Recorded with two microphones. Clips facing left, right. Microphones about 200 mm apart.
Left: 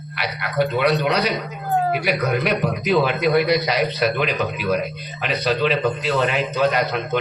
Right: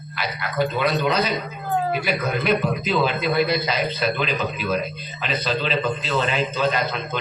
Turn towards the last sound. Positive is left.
turn(degrees=65)  # may be behind; listen again after turning